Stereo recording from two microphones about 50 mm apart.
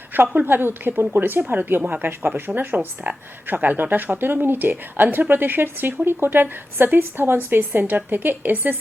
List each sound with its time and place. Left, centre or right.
0.1 s a woman's voice: right